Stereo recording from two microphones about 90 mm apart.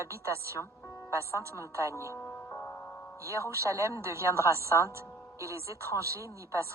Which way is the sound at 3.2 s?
35° right (ahead or behind).